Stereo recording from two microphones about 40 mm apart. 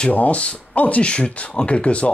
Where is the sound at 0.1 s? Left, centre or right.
Left.